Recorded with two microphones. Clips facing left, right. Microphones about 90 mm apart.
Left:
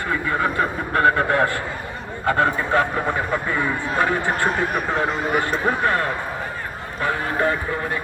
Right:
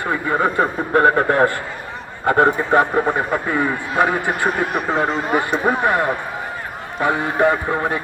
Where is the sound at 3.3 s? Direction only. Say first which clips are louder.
Right 3 dB; 5° right (ahead or behind).